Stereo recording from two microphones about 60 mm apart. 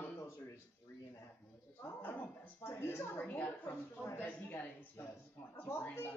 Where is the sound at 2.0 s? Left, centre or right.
Left.